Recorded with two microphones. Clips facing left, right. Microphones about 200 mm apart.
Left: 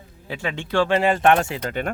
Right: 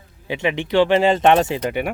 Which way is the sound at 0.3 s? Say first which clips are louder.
Right 6 dB; 15° right (ahead or behind).